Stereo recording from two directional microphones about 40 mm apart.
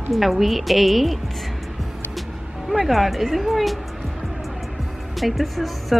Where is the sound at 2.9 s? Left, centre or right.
Centre.